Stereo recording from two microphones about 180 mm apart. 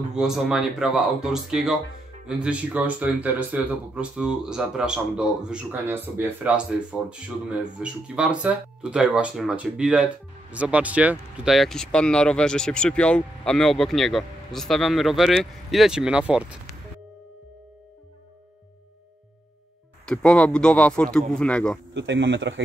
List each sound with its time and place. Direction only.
0.1 s speech: 5° right (ahead or behind)
20.1 s speech: 5° left (ahead or behind)
21.9 s speech: 85° right